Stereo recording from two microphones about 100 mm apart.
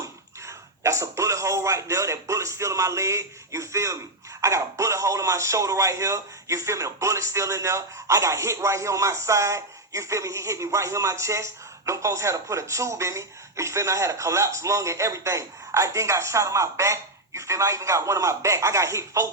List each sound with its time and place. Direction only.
0.4 s speech: 30° right (ahead or behind)